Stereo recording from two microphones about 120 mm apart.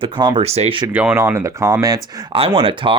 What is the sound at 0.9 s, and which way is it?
Speech, 10° right (ahead or behind).